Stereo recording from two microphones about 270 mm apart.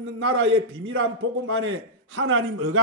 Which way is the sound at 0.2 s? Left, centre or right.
Right.